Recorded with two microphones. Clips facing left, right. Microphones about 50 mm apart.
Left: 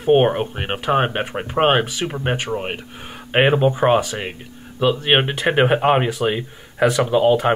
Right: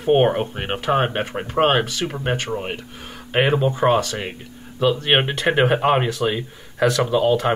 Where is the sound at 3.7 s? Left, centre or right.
Centre.